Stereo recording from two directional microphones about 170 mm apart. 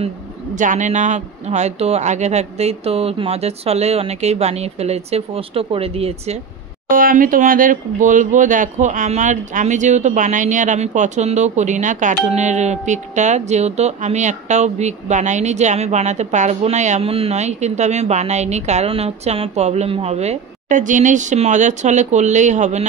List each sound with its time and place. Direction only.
0.6 s speech: 45° right (ahead or behind)
6.9 s speech: 55° right (ahead or behind)